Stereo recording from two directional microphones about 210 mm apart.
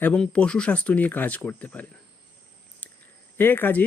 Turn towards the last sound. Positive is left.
turn(degrees=10)  # may be behind; listen again after turning